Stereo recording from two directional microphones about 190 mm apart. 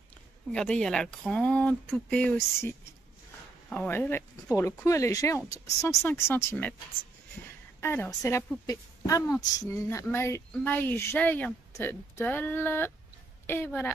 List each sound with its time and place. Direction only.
0.5 s speech: 5° left (ahead or behind)
3.7 s speech: 10° left (ahead or behind)
7.8 s speech: 15° left (ahead or behind)